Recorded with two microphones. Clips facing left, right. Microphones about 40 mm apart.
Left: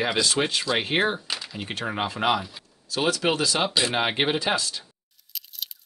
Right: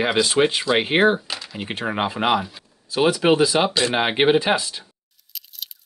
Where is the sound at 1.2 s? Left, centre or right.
Centre.